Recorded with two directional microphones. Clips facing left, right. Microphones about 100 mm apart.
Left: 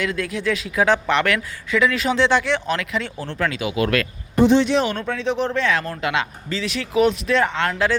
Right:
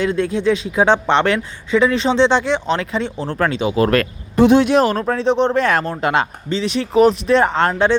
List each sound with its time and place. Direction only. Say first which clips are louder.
0.0 s speech: right 6 dB; 30° right (ahead or behind)
3.2 s speech: right 5 dB; 45° right (ahead or behind)
3.5 s speech: right 6 dB; 30° right (ahead or behind)
4.4 s speech: right 4 dB; 50° right (ahead or behind)
4.9 s speech: right 6 dB; 35° right (ahead or behind)